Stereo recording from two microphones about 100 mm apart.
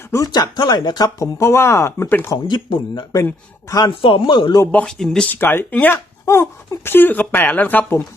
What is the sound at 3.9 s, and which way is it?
Speech, 60° left (ahead or behind).